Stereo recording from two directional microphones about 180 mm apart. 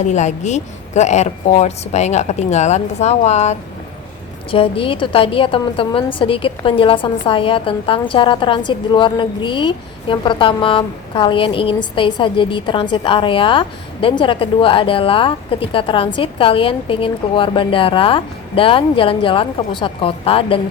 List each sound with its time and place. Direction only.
0.0 s a woman's voice: 40° left (ahead or behind)
4.5 s a woman's voice: 30° left (ahead or behind)